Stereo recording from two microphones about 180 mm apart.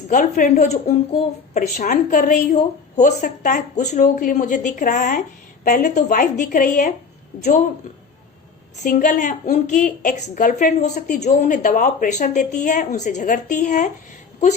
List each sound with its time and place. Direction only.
0.1 s a woman's voice: 45° left (ahead or behind)
8.8 s a woman's voice: 50° left (ahead or behind)